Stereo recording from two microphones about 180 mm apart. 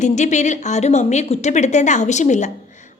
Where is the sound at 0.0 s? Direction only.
40° left (ahead or behind).